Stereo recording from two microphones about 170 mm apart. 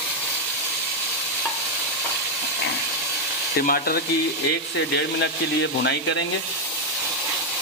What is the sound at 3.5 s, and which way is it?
Sizzle, 60° left (ahead or behind).